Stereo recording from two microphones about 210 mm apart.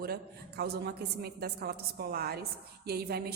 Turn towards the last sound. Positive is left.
turn(degrees=-50)  # may be behind; listen again after turning